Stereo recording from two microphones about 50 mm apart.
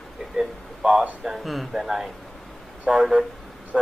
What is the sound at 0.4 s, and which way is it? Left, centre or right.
A man's voice, centre.